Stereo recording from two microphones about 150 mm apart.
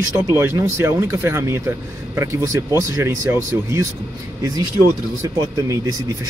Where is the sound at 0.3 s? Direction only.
20° right (ahead or behind).